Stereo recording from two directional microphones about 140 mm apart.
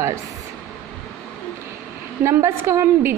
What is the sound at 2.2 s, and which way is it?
Speech, 20° right (ahead or behind).